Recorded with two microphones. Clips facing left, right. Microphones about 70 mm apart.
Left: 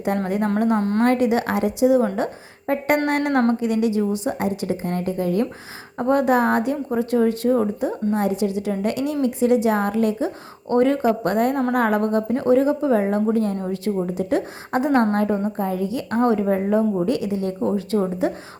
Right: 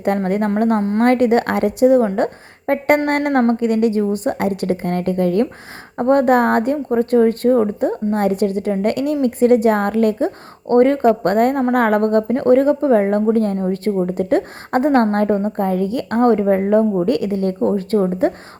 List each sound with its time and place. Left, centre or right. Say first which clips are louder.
0.3 s a woman's voice: right 4 dB; right
0.8 s a woman's voice: right 3 dB; centre
1.0 s a woman's voice: right 6 dB; right
13.9 s a woman's voice: right 4 dB; right
14.2 s a woman's voice: right 5 dB; right